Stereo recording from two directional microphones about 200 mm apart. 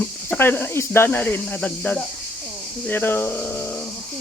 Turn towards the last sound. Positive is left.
turn(degrees=10)  # may be behind; listen again after turning